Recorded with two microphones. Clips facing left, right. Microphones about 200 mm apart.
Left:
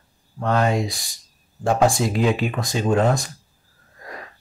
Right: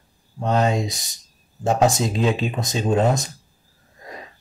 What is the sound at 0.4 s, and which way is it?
Speech, 20° right (ahead or behind).